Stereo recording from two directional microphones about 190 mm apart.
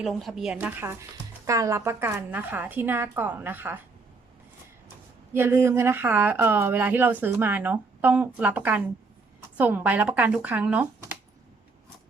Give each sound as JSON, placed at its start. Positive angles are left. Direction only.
{"t": 0.0, "sound": "speech", "side_deg": 0}
{"t": 5.3, "sound": "speech", "side_deg": -15}